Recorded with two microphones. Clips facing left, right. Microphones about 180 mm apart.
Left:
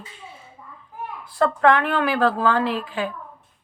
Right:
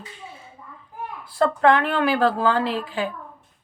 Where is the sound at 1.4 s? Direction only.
30° right (ahead or behind).